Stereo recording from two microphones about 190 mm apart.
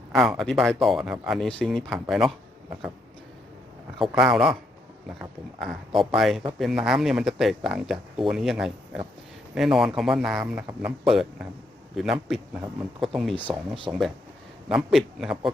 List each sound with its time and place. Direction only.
0.1 s speech: centre (ahead or behind)
4.2 s speech: 5° right (ahead or behind)
13.5 s speech: 25° right (ahead or behind)
14.7 s speech: centre (ahead or behind)